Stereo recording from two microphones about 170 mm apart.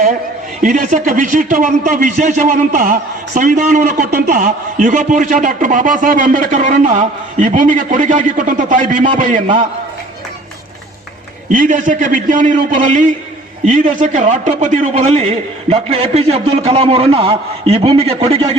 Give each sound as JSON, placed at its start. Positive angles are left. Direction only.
{"t": 0.6, "sound": "a man's voice", "side_deg": -45}
{"t": 11.5, "sound": "a man's voice", "side_deg": -50}